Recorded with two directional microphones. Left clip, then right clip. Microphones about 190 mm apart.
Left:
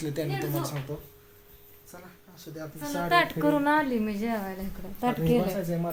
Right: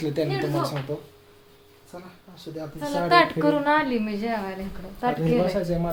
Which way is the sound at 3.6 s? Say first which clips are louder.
Right 3 dB; 50° left (ahead or behind).